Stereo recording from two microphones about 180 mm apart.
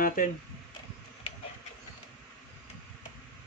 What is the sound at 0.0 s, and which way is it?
Speech, 50° left (ahead or behind).